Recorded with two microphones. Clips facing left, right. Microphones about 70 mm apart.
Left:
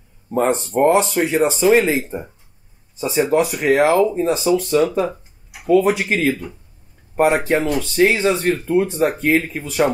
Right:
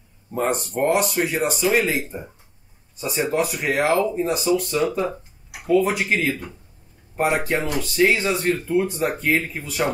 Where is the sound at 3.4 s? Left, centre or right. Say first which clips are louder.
Left 5 dB; left.